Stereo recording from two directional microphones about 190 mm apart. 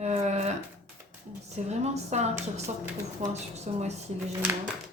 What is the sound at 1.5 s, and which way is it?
Speech, 35° right (ahead or behind).